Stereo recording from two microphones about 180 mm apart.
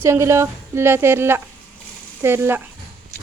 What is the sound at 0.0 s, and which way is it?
A woman's voice, 15° right (ahead or behind).